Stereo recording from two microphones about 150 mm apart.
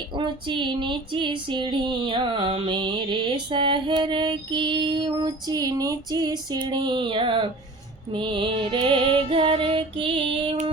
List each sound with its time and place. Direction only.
0.2 s female singing: 35° right (ahead or behind)